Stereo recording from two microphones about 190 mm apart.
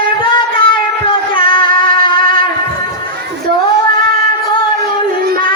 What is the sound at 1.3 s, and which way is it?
Music, 25° left (ahead or behind).